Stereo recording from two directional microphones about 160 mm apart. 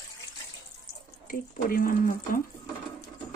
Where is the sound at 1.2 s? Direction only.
60° left (ahead or behind).